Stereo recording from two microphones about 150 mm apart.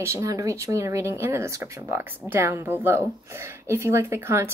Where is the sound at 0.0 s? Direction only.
20° right (ahead or behind).